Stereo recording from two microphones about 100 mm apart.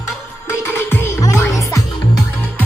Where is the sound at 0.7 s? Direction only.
20° left (ahead or behind).